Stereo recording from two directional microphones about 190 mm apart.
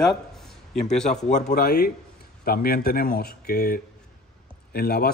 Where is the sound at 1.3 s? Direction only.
50° left (ahead or behind).